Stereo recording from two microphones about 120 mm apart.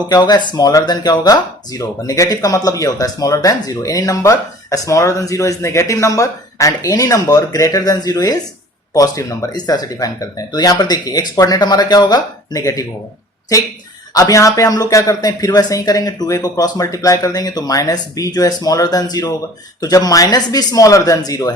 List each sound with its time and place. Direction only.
0.1 s speech: 35° left (ahead or behind)
14.1 s speech: 30° left (ahead or behind)